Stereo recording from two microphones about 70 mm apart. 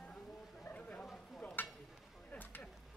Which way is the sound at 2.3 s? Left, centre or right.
Left.